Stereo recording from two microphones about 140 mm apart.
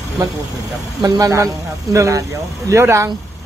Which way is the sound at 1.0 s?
25° right (ahead or behind).